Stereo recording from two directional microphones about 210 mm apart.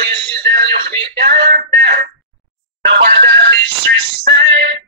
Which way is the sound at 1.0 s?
55° right (ahead or behind).